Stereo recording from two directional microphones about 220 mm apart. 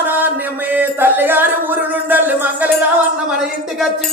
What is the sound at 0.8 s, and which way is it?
Music, 10° right (ahead or behind).